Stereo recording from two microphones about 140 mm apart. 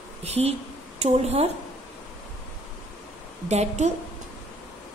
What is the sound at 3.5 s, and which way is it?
Speech, 50° right (ahead or behind).